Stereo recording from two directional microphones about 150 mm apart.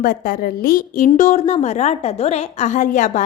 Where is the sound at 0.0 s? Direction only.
70° left (ahead or behind).